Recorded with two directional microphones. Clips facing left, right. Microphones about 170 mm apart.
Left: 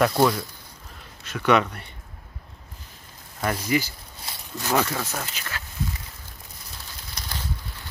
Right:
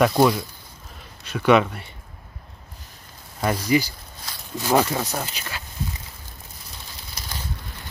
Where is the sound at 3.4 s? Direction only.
25° right (ahead or behind).